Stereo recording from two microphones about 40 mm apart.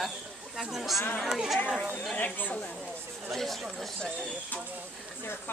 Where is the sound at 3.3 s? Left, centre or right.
Centre.